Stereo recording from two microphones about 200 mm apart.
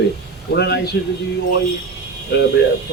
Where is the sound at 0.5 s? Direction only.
55° left (ahead or behind).